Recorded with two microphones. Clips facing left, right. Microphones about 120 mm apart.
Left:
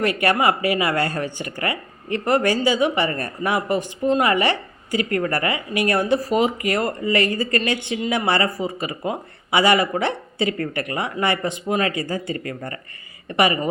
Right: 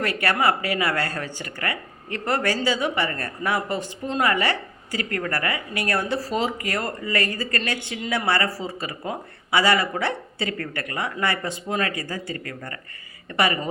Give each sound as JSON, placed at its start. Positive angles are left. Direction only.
{"t": 0.0, "sound": "a man's voice", "side_deg": 15}